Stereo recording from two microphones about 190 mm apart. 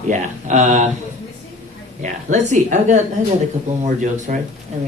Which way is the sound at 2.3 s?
40° right (ahead or behind).